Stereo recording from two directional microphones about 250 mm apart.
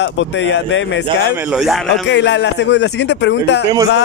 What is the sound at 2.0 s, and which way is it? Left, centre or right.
Speech, left.